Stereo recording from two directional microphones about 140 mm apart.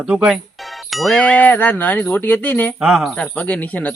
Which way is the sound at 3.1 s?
10° left (ahead or behind).